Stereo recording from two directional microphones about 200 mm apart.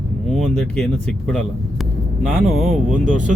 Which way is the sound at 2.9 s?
40° right (ahead or behind).